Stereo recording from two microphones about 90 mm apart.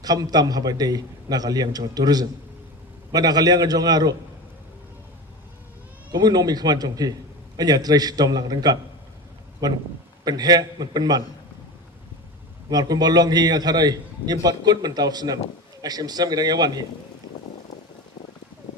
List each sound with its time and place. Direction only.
0.0 s a man's voice: 45° right (ahead or behind)
6.1 s a man's voice: 50° right (ahead or behind)
12.7 s a man's voice: 45° right (ahead or behind)